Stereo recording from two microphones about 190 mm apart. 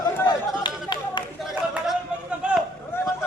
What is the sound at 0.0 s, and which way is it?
Chatter, 15° left (ahead or behind).